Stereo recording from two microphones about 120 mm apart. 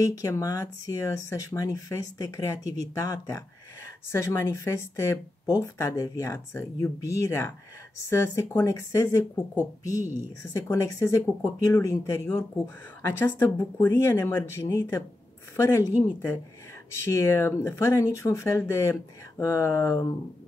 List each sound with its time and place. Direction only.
0.0 s a woman's voice: 30° left (ahead or behind)
17.0 s speech: 25° left (ahead or behind)